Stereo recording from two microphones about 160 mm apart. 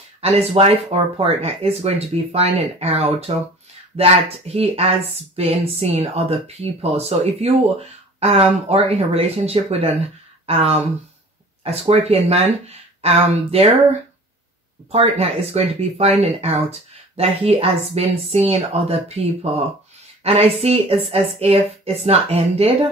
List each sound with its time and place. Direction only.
0.2 s speech: 40° right (ahead or behind)
14.9 s speech: 40° right (ahead or behind)